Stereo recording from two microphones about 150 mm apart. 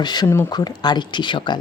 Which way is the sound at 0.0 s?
30° left (ahead or behind).